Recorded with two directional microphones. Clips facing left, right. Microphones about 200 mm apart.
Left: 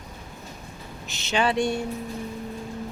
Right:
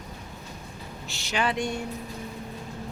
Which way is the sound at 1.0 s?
20° left (ahead or behind).